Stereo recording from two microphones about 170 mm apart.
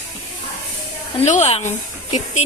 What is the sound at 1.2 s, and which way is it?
Speech, 40° left (ahead or behind).